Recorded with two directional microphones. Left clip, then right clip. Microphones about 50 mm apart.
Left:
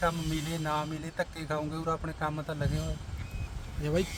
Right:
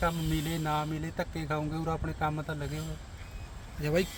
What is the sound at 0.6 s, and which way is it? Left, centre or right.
Speech, centre.